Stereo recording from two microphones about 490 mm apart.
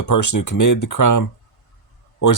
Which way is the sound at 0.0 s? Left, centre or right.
Left.